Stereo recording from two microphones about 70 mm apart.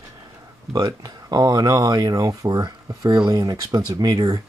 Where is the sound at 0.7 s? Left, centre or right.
Right.